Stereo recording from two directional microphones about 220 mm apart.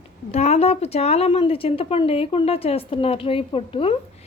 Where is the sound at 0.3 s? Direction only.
30° left (ahead or behind).